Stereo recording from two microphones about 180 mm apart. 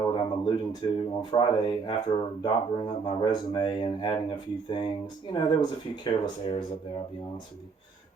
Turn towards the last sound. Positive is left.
turn(degrees=25)  # may be behind; listen again after turning